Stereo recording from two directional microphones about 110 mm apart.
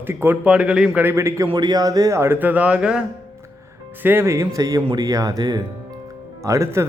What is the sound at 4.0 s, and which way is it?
A man's voice, 20° right (ahead or behind).